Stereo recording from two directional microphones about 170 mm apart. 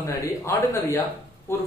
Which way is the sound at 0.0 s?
15° left (ahead or behind).